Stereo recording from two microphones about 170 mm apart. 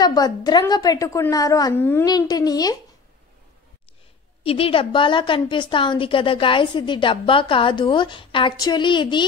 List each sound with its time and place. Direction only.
0.0 s a woman's voice: 25° left (ahead or behind)
2.0 s a woman's voice: 25° left (ahead or behind)
4.4 s a woman's voice: 35° left (ahead or behind)